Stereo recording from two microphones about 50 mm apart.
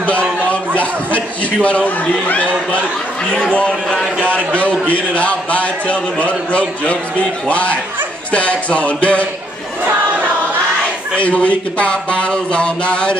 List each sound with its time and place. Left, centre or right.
0.0 s a sound: left
2.2 s a man's voice: left
3.5 s speech: centre
4.6 s a man's voice: left
11.1 s a man's voice: left